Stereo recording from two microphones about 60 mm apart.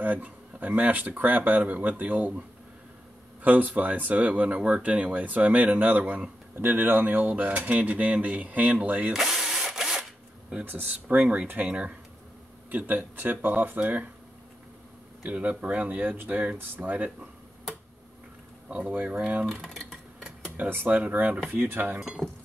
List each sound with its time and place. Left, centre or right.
0.0 s speech: right
3.4 s speech: right
9.1 s drill: centre
10.6 s speech: right
15.2 s speech: right
18.7 s speech: right
19.6 s a sound: centre
20.5 s speech: right